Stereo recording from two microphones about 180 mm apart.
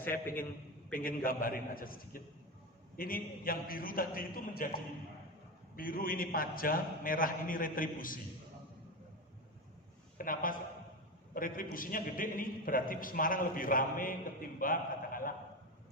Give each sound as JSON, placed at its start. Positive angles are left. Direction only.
{"t": 0.9, "sound": "a man's voice", "side_deg": 55}
{"t": 10.2, "sound": "a man's voice", "side_deg": 50}
{"t": 14.6, "sound": "a sound", "side_deg": 50}